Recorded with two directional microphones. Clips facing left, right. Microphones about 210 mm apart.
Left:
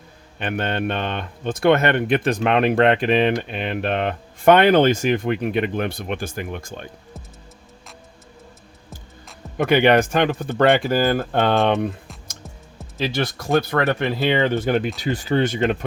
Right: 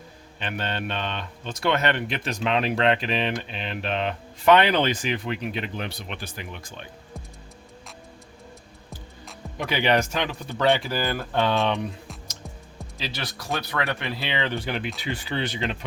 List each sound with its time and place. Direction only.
0.3 s speech: 55° left (ahead or behind)
9.6 s speech: 55° left (ahead or behind)
13.0 s speech: 50° left (ahead or behind)